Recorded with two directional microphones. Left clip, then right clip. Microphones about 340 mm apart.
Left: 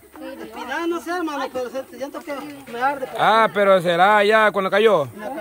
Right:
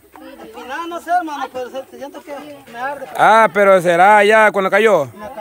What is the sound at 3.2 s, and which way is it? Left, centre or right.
Speech, centre.